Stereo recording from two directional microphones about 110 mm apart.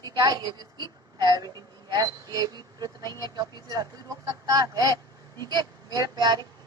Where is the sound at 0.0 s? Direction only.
35° right (ahead or behind).